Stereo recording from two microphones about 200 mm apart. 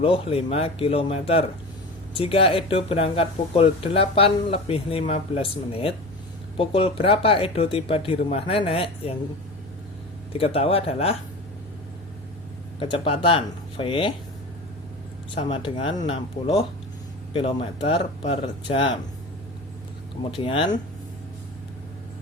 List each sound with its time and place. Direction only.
0.0 s speech: 25° left (ahead or behind)
10.3 s speech: 30° left (ahead or behind)
12.8 s speech: 25° left (ahead or behind)
15.4 s speech: 25° left (ahead or behind)
20.3 s speech: 25° left (ahead or behind)